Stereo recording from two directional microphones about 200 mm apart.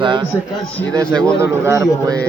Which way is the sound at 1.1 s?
5° left (ahead or behind).